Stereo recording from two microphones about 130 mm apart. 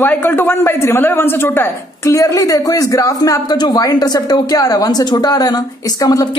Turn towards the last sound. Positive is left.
turn(degrees=30)  # may be behind; listen again after turning